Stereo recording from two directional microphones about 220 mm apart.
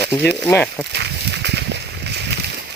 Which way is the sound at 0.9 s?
50° right (ahead or behind).